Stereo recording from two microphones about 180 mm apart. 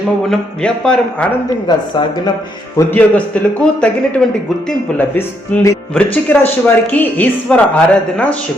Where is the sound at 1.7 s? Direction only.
25° left (ahead or behind).